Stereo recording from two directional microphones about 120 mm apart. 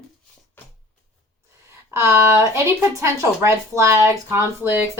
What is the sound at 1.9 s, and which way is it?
Speech, 20° right (ahead or behind).